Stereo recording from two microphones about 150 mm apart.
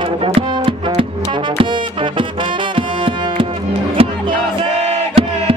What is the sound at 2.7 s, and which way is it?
Music, 35° right (ahead or behind).